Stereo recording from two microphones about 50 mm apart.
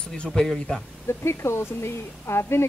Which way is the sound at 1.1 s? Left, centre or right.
Left.